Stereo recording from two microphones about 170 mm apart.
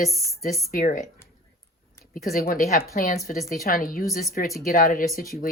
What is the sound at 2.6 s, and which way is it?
Speech, 40° left (ahead or behind).